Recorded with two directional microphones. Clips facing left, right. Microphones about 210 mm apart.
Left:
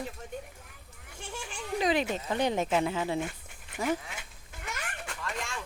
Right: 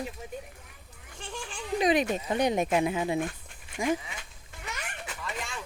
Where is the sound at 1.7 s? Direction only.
15° right (ahead or behind).